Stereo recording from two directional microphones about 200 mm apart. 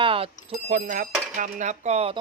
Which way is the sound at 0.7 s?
40° right (ahead or behind).